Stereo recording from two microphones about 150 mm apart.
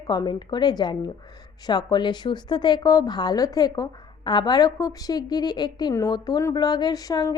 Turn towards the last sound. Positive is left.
turn(degrees=25)  # may be behind; listen again after turning